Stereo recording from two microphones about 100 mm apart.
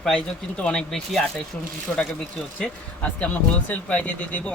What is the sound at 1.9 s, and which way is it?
Speech, 20° left (ahead or behind).